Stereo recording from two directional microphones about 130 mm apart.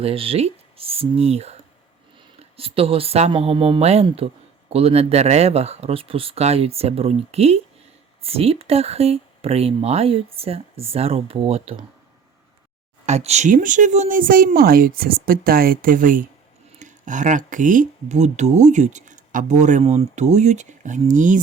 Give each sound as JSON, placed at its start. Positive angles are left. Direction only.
{"t": 0.0, "sound": "speech", "side_deg": -45}
{"t": 13.1, "sound": "speech", "side_deg": -60}
{"t": 16.8, "sound": "speech", "side_deg": -75}